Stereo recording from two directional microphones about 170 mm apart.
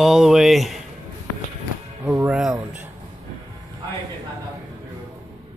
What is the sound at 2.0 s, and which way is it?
Music, 15° right (ahead or behind).